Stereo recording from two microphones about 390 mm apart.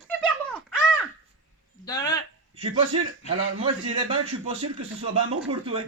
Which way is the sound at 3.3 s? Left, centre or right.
Centre.